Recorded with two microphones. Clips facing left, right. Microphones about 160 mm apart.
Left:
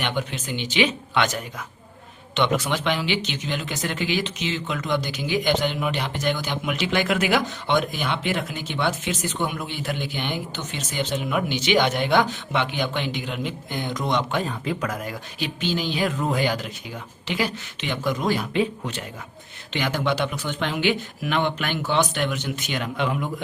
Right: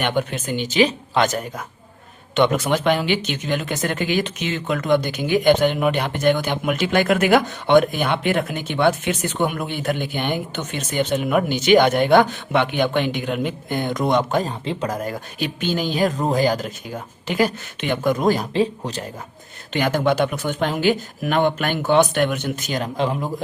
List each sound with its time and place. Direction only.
0.0 s speech: 50° right (ahead or behind)
19.7 s speech: 50° right (ahead or behind)